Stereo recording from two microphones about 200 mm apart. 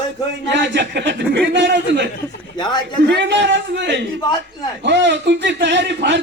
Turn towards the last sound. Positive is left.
turn(degrees=-60)  # may be behind; listen again after turning